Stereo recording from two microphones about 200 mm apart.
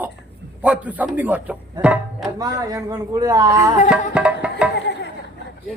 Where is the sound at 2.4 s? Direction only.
15° right (ahead or behind).